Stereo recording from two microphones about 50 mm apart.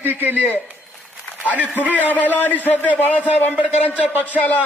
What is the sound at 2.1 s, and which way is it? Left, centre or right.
Speech, left.